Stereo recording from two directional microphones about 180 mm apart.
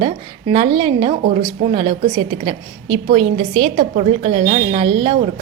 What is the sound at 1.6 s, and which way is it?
A woman's voice, 25° right (ahead or behind).